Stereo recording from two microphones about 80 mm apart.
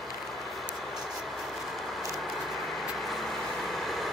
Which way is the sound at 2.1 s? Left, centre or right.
Centre.